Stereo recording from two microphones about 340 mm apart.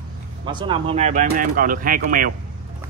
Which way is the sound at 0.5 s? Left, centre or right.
Centre.